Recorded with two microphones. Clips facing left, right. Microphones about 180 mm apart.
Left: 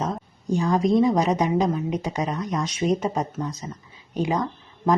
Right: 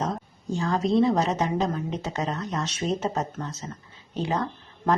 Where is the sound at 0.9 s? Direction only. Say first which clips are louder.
Even; 15° left (ahead or behind).